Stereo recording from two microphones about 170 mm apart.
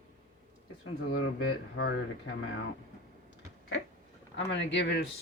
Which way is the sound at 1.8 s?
90° left.